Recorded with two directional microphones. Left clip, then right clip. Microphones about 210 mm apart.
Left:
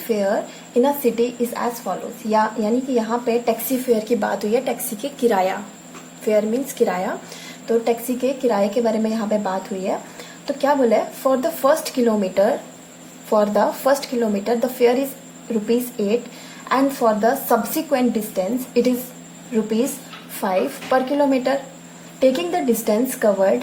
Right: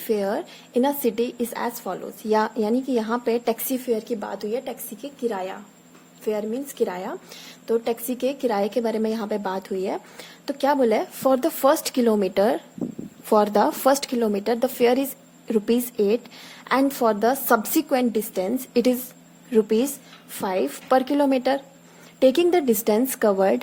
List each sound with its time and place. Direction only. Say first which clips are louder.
0.1 s a woman's voice: left 4 dB; 45° right (ahead or behind)
5.0 s a woman's voice: left 9 dB; 20° right (ahead or behind)
6.2 s speech: left 7 dB; 35° right (ahead or behind)
7.9 s a woman's voice: left 4 dB; 45° right (ahead or behind)